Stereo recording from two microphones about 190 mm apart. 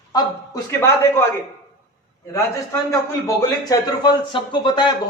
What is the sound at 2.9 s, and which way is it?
A man's voice, 20° left (ahead or behind).